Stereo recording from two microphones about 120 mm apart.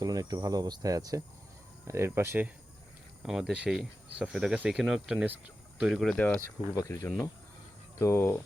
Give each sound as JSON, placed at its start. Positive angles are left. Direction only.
{"t": 0.0, "sound": "speech", "side_deg": -30}
{"t": 3.2, "sound": "speech", "side_deg": -5}
{"t": 6.1, "sound": "speech", "side_deg": 10}
{"t": 6.7, "sound": "speech", "side_deg": 25}